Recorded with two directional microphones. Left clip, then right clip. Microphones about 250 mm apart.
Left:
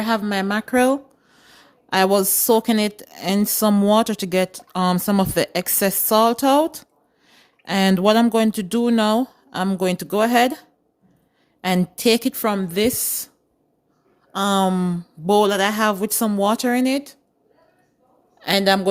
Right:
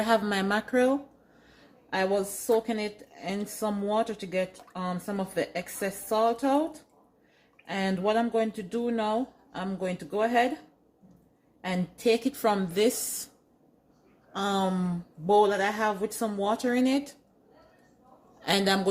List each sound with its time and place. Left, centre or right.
0.0 s speech: left
11.6 s speech: left
14.3 s speech: left
18.3 s a man's voice: left